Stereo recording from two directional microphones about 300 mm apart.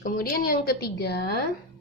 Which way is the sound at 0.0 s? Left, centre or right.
Left.